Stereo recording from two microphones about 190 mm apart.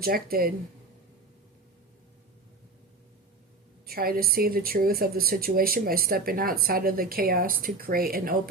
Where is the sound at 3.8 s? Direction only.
50° right (ahead or behind).